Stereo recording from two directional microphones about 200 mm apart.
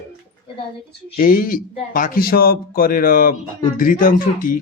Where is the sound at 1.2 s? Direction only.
45° left (ahead or behind).